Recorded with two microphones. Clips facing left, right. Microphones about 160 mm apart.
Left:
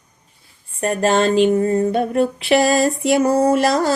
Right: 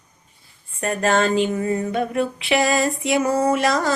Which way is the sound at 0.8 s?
35° left (ahead or behind).